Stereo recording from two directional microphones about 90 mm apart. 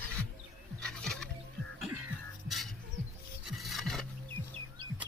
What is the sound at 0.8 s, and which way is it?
Music, 5° left (ahead or behind).